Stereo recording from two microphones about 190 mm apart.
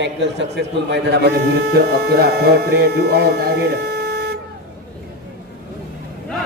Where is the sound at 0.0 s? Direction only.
65° right (ahead or behind).